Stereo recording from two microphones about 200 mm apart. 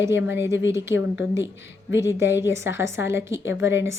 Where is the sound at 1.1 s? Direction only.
10° right (ahead or behind).